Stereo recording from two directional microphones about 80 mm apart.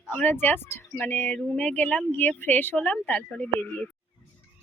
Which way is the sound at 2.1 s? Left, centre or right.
Left.